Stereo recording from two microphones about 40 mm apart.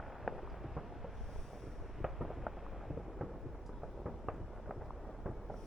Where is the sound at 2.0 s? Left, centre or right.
Centre.